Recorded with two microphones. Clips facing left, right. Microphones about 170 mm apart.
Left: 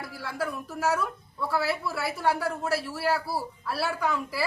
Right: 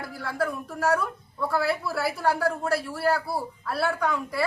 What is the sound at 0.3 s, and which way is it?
Speech, 5° left (ahead or behind).